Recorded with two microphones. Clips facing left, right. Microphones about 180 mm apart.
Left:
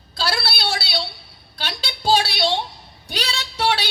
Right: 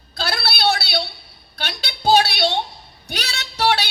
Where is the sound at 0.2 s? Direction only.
50° right (ahead or behind).